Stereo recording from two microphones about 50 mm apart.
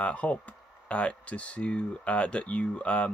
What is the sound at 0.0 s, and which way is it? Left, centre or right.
Speech, left.